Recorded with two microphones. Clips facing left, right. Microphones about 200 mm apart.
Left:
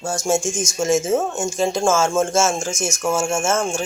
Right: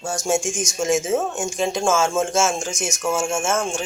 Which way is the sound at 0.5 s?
20° right (ahead or behind).